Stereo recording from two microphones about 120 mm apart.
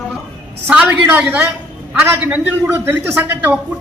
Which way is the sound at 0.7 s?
15° right (ahead or behind).